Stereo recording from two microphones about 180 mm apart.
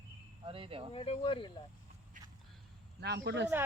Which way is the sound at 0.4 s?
30° right (ahead or behind).